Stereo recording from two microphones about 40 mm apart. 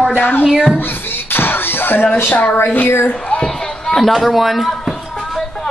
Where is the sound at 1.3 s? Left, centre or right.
Left.